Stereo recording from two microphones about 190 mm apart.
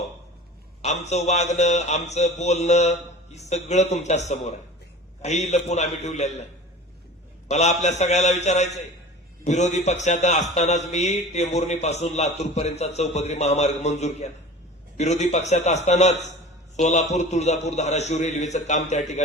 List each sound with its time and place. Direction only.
0.8 s a man's voice: 35° left (ahead or behind)
7.4 s a man's voice: 35° left (ahead or behind)